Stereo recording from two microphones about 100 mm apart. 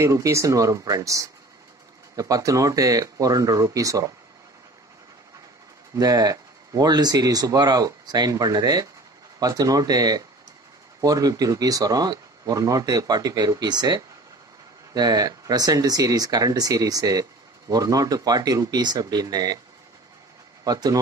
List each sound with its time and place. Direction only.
0.0 s speech: 30° right (ahead or behind)
5.9 s speech: 35° right (ahead or behind)
20.6 s speech: 40° right (ahead or behind)